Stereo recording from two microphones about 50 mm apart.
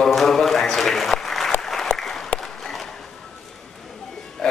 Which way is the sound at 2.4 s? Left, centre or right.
Centre.